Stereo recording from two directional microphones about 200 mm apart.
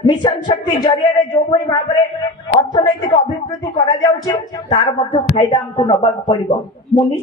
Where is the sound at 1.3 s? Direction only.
20° left (ahead or behind).